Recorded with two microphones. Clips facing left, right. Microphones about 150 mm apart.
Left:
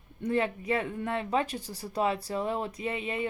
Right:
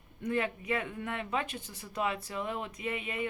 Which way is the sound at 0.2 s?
30° left (ahead or behind).